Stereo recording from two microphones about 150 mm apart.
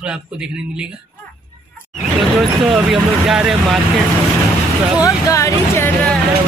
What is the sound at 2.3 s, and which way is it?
Speech, centre (ahead or behind).